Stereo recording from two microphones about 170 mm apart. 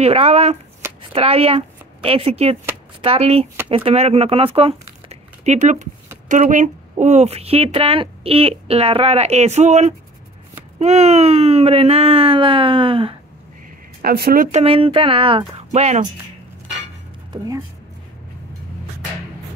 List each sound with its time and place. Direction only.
0.0 s speech: 35° right (ahead or behind)
14.0 s speech: 65° right (ahead or behind)
14.5 s speech: 35° right (ahead or behind)
15.7 s speech: 45° right (ahead or behind)